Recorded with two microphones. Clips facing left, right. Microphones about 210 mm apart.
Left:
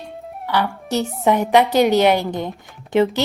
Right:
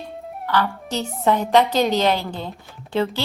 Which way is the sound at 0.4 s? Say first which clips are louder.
Left 1 dB; 15° left (ahead or behind).